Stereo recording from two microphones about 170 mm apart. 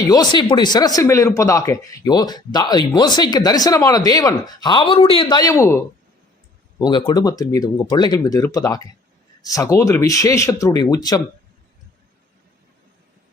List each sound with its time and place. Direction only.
0.1 s speech: 25° left (ahead or behind)